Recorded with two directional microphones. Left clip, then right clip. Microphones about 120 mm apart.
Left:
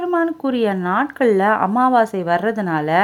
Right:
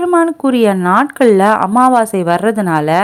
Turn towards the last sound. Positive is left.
turn(degrees=-35)  # may be behind; listen again after turning